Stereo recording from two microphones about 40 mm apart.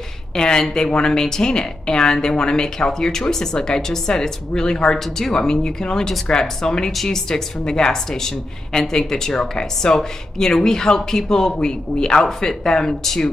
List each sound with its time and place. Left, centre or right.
0.3 s a woman's voice: centre